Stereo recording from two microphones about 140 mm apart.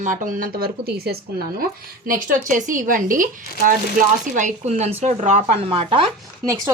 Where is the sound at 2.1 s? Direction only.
70° right (ahead or behind); by 5.4 s 55° right (ahead or behind).